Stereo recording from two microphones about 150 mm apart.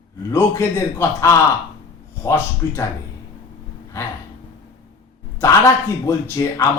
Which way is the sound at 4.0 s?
20° left (ahead or behind).